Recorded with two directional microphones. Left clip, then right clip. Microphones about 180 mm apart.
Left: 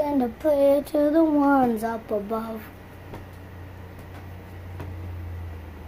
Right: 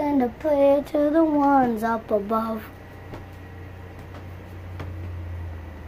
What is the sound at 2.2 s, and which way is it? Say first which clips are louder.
Speech: right 5 dB; 15° right (ahead or behind).